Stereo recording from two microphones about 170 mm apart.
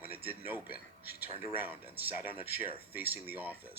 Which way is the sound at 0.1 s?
35° right (ahead or behind).